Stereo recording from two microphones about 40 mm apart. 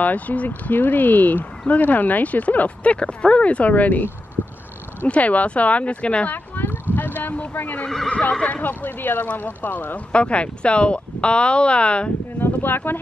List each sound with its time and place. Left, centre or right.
0.0 s speech: left
5.0 s speech: left
6.3 s a sound: left
7.5 s speech: left
8.1 s speech: left
8.6 s speech: left
10.1 s speech: left
12.4 s speech: left